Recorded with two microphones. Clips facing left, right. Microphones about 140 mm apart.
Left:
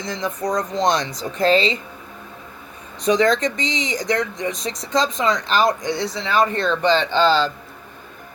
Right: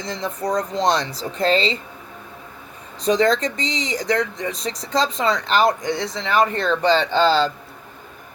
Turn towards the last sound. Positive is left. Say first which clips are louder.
# even
turn(degrees=-35)  # may be behind; listen again after turning